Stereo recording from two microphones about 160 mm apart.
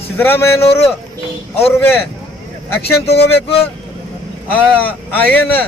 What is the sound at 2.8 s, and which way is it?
Speech, 90° left.